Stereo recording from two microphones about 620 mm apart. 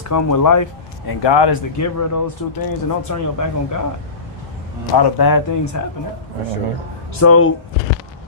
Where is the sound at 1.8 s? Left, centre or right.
Left.